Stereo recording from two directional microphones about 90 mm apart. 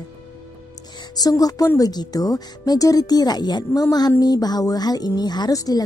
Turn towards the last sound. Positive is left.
turn(degrees=40)  # may be behind; listen again after turning